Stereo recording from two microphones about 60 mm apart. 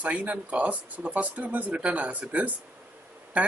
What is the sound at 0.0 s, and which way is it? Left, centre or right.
Speech, right.